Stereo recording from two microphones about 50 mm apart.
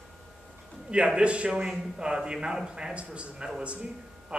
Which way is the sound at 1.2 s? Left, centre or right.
Right.